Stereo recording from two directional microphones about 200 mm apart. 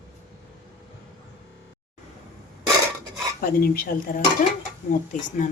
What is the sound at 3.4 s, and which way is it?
Dishes, 50° left (ahead or behind).